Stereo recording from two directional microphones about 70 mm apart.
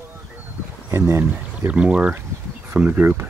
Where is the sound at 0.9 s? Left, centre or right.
Right.